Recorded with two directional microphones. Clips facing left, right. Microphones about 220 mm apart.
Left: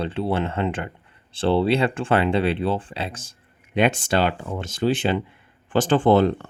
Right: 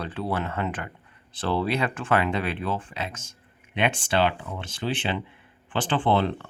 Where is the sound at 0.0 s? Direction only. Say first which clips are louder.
Left 5 dB; 25° left (ahead or behind).